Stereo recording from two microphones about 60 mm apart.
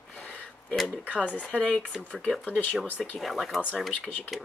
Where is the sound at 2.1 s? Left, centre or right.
Centre.